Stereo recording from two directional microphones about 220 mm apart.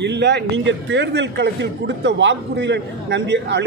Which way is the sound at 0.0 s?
50° right (ahead or behind).